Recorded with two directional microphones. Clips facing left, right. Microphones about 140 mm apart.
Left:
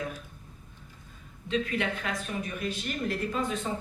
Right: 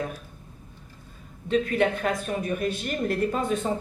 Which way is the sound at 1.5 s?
50° right (ahead or behind).